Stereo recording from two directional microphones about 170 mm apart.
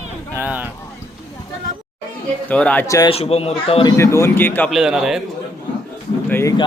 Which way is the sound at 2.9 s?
20° left (ahead or behind).